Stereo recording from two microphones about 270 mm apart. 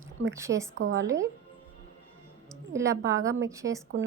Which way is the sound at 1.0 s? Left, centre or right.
Centre.